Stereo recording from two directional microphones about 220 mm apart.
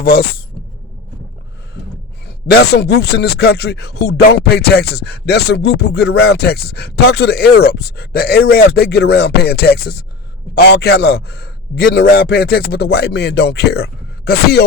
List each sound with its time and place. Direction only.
0.0 s speech: 45° left (ahead or behind)
2.2 s speech: 50° left (ahead or behind)